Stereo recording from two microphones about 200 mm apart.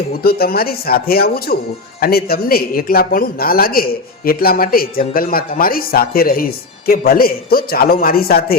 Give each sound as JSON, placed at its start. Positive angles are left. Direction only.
{"t": 0.2, "sound": "speech", "side_deg": 50}